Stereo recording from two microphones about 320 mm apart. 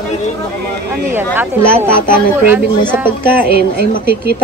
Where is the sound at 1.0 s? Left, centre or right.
Centre.